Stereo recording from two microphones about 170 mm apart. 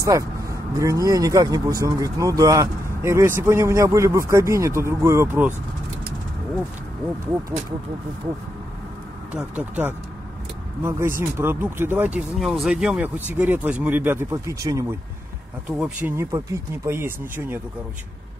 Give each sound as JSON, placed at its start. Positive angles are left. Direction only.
{"t": 0.0, "sound": "speech", "side_deg": -20}
{"t": 9.3, "sound": "speech", "side_deg": -5}